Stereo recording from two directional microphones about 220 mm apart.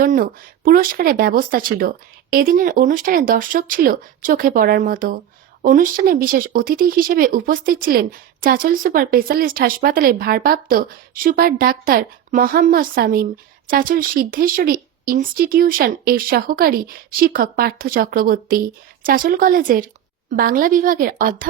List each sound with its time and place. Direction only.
0.0 s speech: 40° right (ahead or behind)